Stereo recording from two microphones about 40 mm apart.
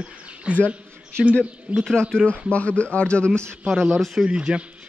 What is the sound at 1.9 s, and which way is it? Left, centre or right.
Speech, centre.